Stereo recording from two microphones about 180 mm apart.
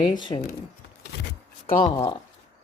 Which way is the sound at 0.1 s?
25° left (ahead or behind).